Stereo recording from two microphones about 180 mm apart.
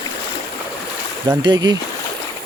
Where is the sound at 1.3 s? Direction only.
25° right (ahead or behind).